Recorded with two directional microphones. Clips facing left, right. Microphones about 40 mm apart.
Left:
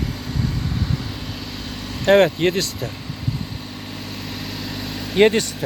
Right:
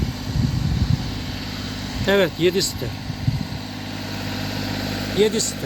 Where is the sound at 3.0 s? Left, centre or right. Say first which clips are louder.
Right 1 dB; centre.